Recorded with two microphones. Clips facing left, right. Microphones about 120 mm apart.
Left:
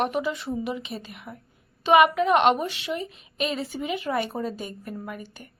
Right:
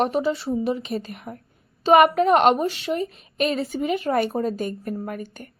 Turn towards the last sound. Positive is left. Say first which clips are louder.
# right 5 dB
turn(degrees=-50)  # may be behind; listen again after turning